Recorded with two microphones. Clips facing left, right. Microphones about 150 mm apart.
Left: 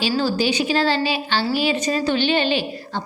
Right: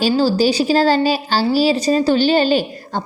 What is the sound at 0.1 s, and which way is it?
A woman's voice, 35° right (ahead or behind).